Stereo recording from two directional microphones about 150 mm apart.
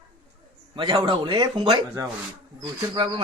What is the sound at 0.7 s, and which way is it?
A man's voice, 30° right (ahead or behind).